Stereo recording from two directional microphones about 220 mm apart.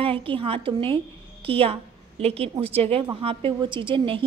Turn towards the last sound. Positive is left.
turn(degrees=-20)  # may be behind; listen again after turning